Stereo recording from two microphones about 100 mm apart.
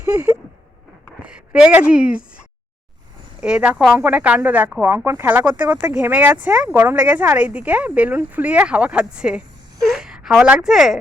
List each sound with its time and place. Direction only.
1.2 s a sound: 10° right (ahead or behind)
1.9 s speech: 10° right (ahead or behind)
3.4 s speech: 10° right (ahead or behind)